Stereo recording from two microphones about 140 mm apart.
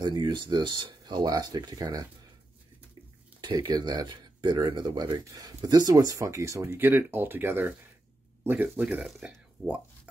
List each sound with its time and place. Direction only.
0.0 s speech: 30° right (ahead or behind)
3.3 s speech: 30° right (ahead or behind); by 9.8 s 10° right (ahead or behind)